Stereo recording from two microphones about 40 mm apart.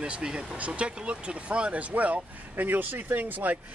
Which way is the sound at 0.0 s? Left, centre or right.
Right.